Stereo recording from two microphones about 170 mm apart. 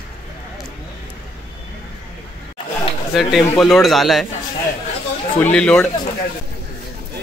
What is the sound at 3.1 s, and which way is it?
A child's voice, centre (ahead or behind).